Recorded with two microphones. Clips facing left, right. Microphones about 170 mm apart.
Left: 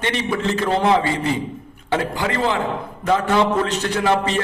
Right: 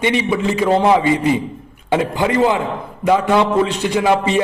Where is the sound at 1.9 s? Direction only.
20° right (ahead or behind).